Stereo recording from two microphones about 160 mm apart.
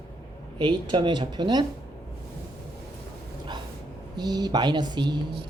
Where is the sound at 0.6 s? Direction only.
30° right (ahead or behind).